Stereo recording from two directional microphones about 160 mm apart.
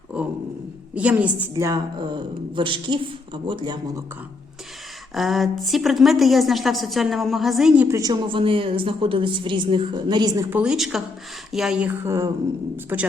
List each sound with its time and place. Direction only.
0.9 s speech: 10° right (ahead or behind)
1.5 s speech: 20° right (ahead or behind)
5.1 s a woman's voice: centre (ahead or behind)
7.9 s speech: 20° right (ahead or behind)
8.3 s a woman's voice: 30° right (ahead or behind)
10.5 s a woman's voice: 5° right (ahead or behind)